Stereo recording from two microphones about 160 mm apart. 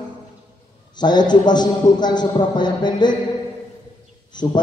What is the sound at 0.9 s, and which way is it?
A man's voice, 25° left (ahead or behind).